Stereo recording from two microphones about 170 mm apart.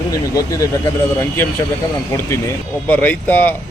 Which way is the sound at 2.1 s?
15° left (ahead or behind).